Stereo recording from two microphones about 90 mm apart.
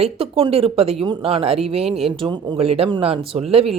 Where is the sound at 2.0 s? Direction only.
75° right (ahead or behind).